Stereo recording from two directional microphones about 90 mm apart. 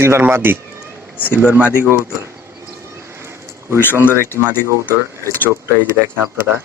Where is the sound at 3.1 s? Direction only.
30° right (ahead or behind).